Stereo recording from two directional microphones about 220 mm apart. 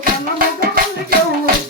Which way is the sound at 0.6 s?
40° right (ahead or behind).